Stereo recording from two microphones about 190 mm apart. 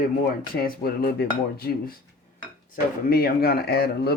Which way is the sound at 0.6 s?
55° left (ahead or behind).